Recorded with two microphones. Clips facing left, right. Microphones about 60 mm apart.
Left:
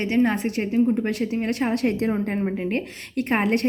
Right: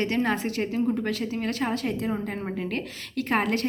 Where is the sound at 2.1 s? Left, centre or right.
Left.